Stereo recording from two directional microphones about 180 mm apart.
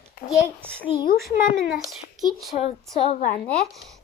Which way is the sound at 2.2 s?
35° left (ahead or behind).